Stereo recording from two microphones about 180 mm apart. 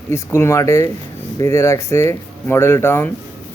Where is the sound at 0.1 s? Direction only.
15° left (ahead or behind).